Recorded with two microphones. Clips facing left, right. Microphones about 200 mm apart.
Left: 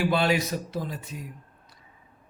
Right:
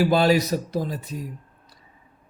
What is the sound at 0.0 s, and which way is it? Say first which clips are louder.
Speech: right 5 dB; 40° right (ahead or behind).